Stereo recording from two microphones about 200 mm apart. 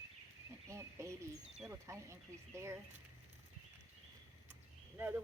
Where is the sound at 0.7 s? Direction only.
15° right (ahead or behind).